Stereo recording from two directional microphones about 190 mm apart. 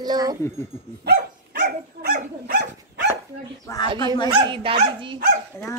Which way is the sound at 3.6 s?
20° left (ahead or behind).